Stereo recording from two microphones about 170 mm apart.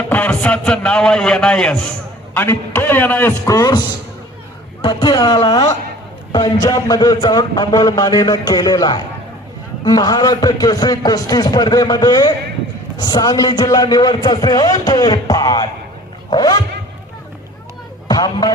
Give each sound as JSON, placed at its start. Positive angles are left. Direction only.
{"t": 0.1, "sound": "a man's voice", "side_deg": 10}
{"t": 4.8, "sound": "a man's voice", "side_deg": 25}
{"t": 18.1, "sound": "speech", "side_deg": 25}